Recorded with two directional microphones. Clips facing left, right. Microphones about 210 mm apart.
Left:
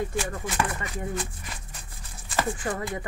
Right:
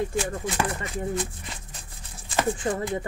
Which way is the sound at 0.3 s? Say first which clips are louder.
Right 2 dB; 30° right (ahead or behind).